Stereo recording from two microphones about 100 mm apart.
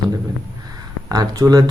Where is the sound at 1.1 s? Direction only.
40° right (ahead or behind).